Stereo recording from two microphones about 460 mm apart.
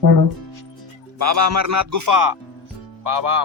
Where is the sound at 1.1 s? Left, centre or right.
Right.